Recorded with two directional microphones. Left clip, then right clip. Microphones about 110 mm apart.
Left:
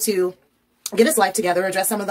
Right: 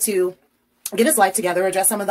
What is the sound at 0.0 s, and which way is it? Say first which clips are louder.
A woman's voice: even; 25° left (ahead or behind).